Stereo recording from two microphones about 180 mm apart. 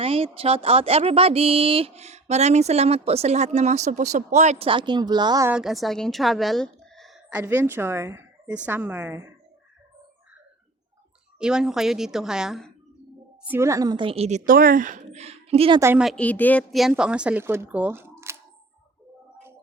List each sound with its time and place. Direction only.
0.0 s speech: 30° right (ahead or behind)
5.5 s speech: 5° right (ahead or behind)
11.3 s a woman's voice: 5° right (ahead or behind)
13.4 s speech: 10° right (ahead or behind); by 15.8 s 30° right (ahead or behind)
15.8 s speech: 15° right (ahead or behind)
16.0 s a woman's voice: 5° left (ahead or behind); by 18.3 s 15° right (ahead or behind)